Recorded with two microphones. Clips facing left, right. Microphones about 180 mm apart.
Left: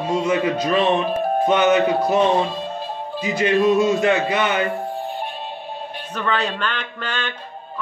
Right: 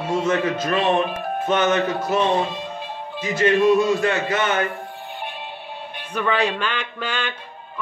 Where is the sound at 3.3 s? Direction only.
15° left (ahead or behind).